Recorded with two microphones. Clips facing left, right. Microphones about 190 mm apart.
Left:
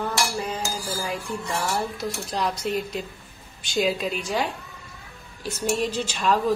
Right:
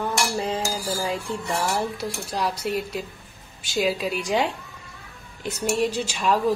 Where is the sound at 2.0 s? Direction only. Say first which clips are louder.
Even; 10° right (ahead or behind).